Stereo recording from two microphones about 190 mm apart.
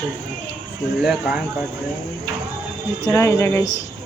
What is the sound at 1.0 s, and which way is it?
Speech, 5° right (ahead or behind).